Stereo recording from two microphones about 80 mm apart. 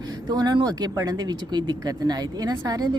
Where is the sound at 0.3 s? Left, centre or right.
Right.